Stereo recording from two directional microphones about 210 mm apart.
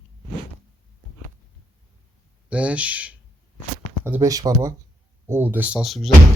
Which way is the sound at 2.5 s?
5° right (ahead or behind).